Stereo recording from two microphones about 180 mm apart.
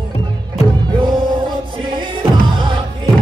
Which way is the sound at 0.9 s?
25° right (ahead or behind).